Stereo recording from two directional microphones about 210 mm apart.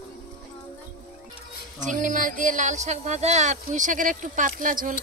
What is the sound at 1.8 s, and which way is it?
Speech, 40° right (ahead or behind).